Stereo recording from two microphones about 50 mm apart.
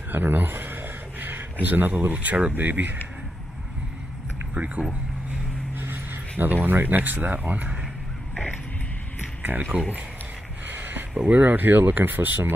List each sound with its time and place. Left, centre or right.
0.1 s speech: right
4.8 s speech: right
5.8 s speech: right
9.4 s speech: right
10.7 s a sound: right
11.2 s speech: right